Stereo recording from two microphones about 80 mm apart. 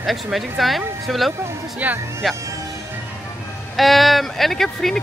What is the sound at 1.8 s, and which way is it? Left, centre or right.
Speech, right.